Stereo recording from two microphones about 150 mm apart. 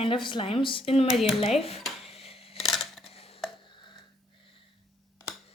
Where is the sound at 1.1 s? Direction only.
Centre (ahead or behind).